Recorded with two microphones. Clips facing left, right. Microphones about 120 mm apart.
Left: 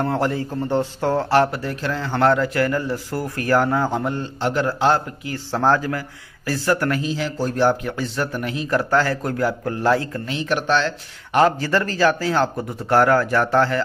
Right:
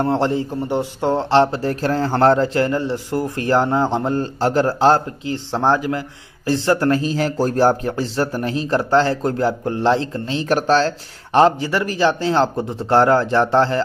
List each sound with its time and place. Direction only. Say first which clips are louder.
0.0 s speech: right 3 dB; 25° right (ahead or behind)
1.7 s speech: right 6 dB; 40° right (ahead or behind)
5.3 s speech: right 1 dB; 20° right (ahead or behind)
7.1 s speech: right 4 dB; 45° right (ahead or behind)
11.6 s speech: even; 15° right (ahead or behind)